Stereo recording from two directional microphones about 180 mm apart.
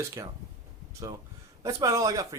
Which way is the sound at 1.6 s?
20° right (ahead or behind).